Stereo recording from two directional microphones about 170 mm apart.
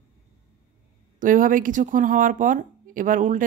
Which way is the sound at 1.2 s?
50° right (ahead or behind).